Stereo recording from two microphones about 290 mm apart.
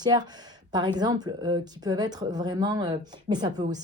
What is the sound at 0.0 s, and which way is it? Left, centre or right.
A woman's voice, centre.